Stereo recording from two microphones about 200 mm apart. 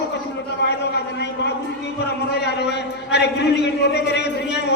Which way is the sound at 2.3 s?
55° left (ahead or behind).